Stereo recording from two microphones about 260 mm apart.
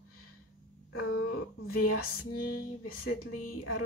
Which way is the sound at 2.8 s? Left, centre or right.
Left.